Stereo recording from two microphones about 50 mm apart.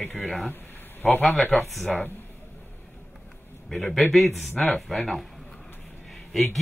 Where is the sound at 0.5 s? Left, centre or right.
Left.